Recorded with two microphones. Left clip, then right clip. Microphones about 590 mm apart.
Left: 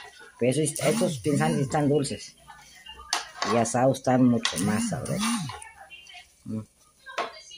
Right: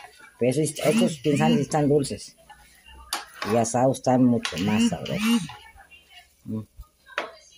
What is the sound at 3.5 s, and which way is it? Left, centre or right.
Speech, right.